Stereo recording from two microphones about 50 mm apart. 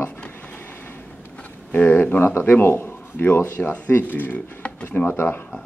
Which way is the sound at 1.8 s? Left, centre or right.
Left.